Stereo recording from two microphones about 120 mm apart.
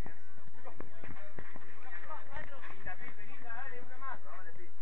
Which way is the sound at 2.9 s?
25° left (ahead or behind).